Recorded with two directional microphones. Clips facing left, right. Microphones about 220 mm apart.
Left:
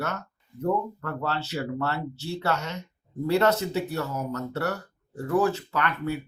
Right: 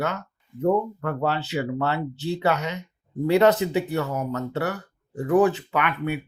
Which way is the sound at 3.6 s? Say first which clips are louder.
Right 5 dB; 75° right (ahead or behind).